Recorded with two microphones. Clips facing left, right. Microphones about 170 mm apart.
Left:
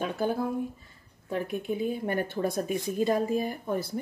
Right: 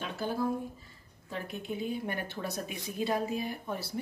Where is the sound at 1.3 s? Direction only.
50° left (ahead or behind).